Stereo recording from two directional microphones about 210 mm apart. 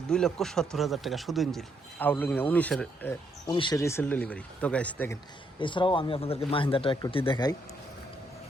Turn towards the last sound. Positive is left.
turn(degrees=20)  # may be behind; listen again after turning